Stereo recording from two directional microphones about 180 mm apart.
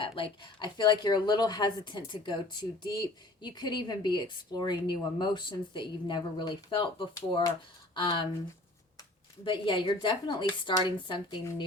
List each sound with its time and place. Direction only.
0.0 s a woman's voice: 25° left (ahead or behind)
9.4 s a woman's voice: 25° left (ahead or behind)